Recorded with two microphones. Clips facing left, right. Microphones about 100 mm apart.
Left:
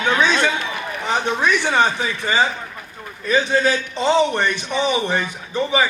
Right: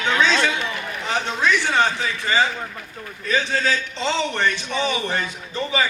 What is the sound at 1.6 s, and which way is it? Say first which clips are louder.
A man's voice: left 2 dB; 15° left (ahead or behind).